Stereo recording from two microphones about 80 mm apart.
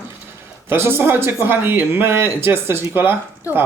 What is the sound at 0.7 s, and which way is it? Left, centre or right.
Speech, right.